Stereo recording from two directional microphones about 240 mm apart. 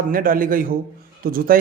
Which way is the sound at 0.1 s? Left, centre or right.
Right.